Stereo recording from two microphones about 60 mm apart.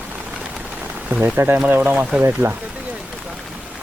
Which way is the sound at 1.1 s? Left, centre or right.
Right.